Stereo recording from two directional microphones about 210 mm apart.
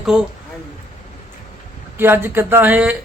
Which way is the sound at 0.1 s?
5° right (ahead or behind).